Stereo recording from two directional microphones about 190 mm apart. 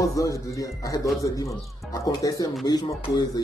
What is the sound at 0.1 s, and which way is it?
Speech, 15° left (ahead or behind).